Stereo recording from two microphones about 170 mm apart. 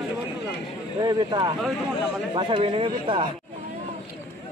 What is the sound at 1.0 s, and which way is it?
Speech, 25° right (ahead or behind).